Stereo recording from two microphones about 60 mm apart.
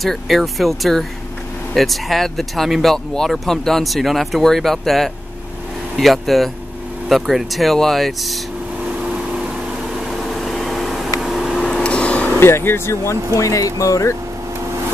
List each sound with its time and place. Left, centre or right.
0.0 s speech: centre
9.0 s vehicle: centre
10.1 s a sound: centre
11.1 s vehicle: centre
11.8 s a sound: centre
12.4 s speech: left
13.4 s speech: left